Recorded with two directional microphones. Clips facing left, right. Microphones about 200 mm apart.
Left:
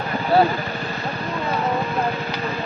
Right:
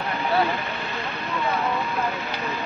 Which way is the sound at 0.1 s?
35° left (ahead or behind).